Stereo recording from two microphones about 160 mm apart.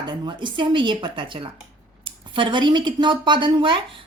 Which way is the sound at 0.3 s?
30° right (ahead or behind).